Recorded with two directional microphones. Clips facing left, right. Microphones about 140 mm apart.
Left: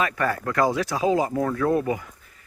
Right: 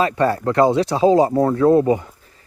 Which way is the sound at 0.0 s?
30° right (ahead or behind).